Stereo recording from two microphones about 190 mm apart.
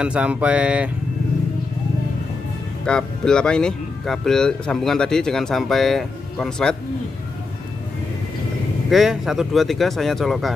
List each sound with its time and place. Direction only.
0.0 s speech: 5° right (ahead or behind)
2.8 s speech: 5° left (ahead or behind)
8.9 s speech: centre (ahead or behind)